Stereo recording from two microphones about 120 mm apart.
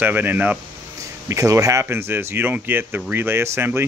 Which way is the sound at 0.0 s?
15° right (ahead or behind).